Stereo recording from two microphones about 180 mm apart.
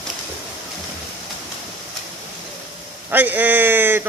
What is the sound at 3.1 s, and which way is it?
Speech, 10° right (ahead or behind).